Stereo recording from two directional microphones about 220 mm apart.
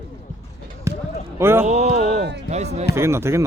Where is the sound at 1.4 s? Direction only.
10° right (ahead or behind).